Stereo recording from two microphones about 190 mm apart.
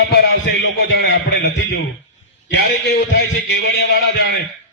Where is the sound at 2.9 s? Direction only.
60° left (ahead or behind).